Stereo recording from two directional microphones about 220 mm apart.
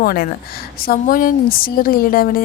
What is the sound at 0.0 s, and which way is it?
A woman's voice, 40° left (ahead or behind).